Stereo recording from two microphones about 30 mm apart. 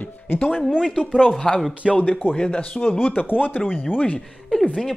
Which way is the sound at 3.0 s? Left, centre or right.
Left.